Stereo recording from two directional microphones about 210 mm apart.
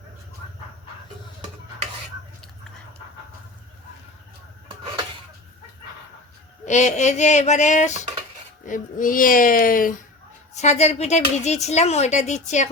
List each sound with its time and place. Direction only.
6.7 s a woman's voice: 35° left (ahead or behind)